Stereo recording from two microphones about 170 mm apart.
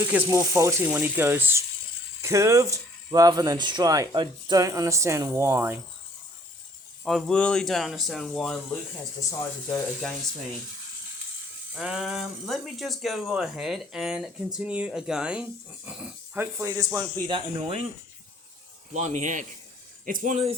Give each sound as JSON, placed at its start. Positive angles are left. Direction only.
{"t": 0.0, "sound": "speech", "side_deg": -10}
{"t": 7.0, "sound": "speech", "side_deg": 0}
{"t": 9.4, "sound": "speech", "side_deg": 15}
{"t": 11.7, "sound": "speech", "side_deg": 0}
{"t": 18.9, "sound": "speech", "side_deg": -45}